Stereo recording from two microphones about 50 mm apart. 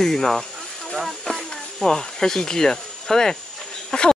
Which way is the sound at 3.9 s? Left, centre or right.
Centre.